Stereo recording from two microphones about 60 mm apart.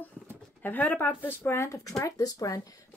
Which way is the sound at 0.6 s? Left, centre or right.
Left.